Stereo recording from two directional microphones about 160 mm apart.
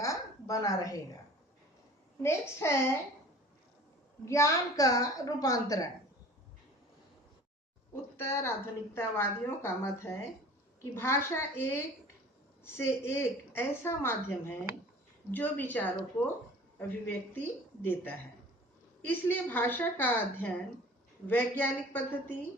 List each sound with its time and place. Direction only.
0.0 s a sound: 20° left (ahead or behind)
2.2 s a woman's voice: 15° left (ahead or behind)
4.3 s a woman's voice: 20° left (ahead or behind)
8.1 s a woman's voice: 15° left (ahead or behind)
19.1 s a woman's voice: 10° left (ahead or behind)